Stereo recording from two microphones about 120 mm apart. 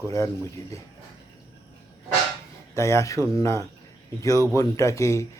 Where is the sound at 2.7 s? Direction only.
25° left (ahead or behind).